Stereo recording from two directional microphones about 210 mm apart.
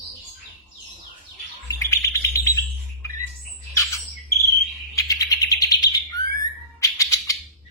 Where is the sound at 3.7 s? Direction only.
15° left (ahead or behind).